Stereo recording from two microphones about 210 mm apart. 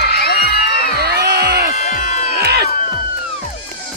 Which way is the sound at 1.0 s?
50° right (ahead or behind).